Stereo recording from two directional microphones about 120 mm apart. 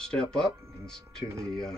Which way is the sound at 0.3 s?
5° left (ahead or behind).